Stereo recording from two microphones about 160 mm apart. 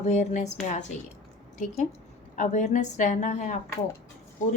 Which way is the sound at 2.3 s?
50° left (ahead or behind).